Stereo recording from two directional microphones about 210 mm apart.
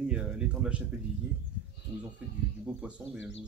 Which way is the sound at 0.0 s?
5° right (ahead or behind).